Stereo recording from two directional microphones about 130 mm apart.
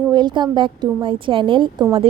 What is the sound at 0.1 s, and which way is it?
A woman's voice, 35° right (ahead or behind).